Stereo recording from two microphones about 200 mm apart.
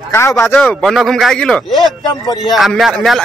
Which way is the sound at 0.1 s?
15° left (ahead or behind).